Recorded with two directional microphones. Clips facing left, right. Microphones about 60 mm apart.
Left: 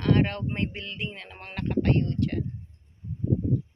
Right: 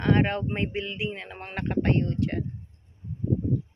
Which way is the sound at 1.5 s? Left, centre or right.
Right.